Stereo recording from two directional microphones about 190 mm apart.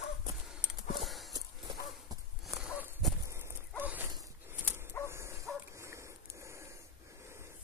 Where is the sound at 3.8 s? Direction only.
10° right (ahead or behind).